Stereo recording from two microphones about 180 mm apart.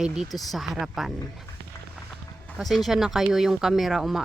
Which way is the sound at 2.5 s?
Centre (ahead or behind).